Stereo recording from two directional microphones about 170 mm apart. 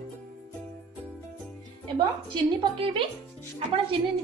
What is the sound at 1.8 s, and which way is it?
A woman's voice, 30° right (ahead or behind).